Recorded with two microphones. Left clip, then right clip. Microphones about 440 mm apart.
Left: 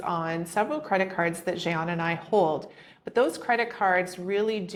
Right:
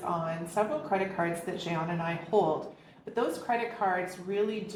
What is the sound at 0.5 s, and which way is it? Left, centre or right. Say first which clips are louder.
A woman's voice: left 3 dB; left.